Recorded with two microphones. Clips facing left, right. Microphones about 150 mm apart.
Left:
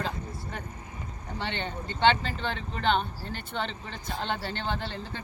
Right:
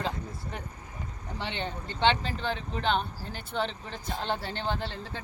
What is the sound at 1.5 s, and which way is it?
Speech, centre (ahead or behind).